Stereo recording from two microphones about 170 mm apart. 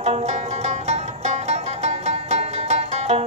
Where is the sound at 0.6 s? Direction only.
40° right (ahead or behind).